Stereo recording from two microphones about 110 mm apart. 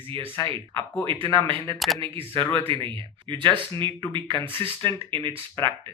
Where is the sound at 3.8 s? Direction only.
45° right (ahead or behind).